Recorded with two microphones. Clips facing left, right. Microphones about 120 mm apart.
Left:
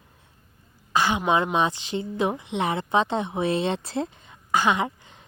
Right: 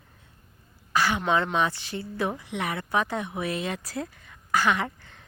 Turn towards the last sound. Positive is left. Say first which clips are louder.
# left 4 dB
turn(degrees=20)  # may be behind; listen again after turning